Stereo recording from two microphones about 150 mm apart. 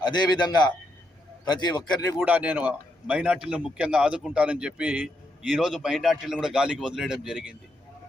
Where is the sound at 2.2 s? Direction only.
10° right (ahead or behind).